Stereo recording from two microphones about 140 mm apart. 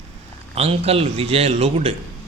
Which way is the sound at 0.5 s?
45° right (ahead or behind).